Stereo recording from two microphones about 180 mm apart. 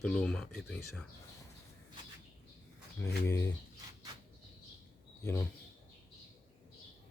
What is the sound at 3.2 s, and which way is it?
Speech, 15° left (ahead or behind).